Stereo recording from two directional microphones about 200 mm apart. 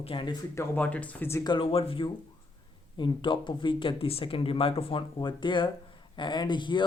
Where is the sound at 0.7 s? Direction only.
5° left (ahead or behind).